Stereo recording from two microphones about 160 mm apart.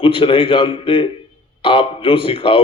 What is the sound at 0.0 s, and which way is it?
A man's voice, 35° left (ahead or behind).